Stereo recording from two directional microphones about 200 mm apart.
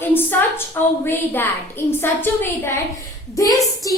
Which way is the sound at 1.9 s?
10° left (ahead or behind).